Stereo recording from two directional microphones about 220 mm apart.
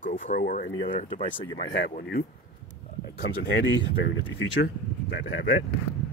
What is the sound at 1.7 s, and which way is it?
Speech, 50° left (ahead or behind).